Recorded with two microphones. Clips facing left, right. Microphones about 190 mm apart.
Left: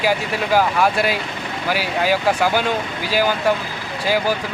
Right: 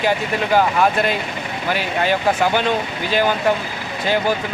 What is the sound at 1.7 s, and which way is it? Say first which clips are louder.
Speech: even; 5° left (ahead or behind).